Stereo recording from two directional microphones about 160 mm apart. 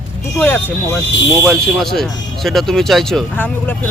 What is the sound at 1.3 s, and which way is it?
Speech, 15° right (ahead or behind).